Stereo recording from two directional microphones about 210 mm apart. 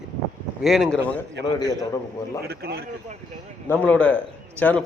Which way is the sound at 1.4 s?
55° right (ahead or behind).